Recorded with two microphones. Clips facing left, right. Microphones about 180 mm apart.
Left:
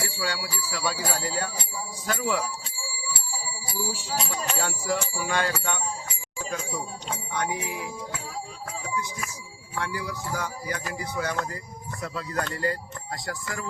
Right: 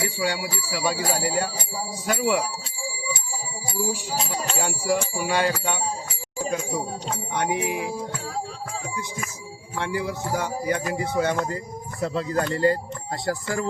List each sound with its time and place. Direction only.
0.2 s bell: 15° right (ahead or behind)
4.5 s speech: 15° right (ahead or behind)
7.3 s music: 20° right (ahead or behind)
9.7 s music: 25° right (ahead or behind)